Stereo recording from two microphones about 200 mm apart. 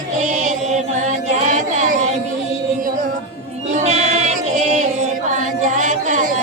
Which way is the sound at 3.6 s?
35° right (ahead or behind).